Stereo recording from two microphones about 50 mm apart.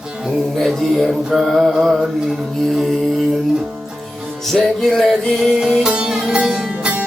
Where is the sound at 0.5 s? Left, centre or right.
Centre.